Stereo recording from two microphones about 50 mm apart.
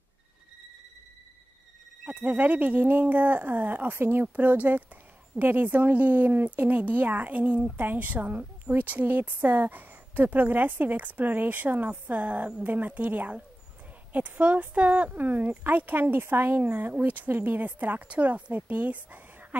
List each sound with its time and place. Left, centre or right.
2.0 s speech: right
11.9 s a woman's voice: right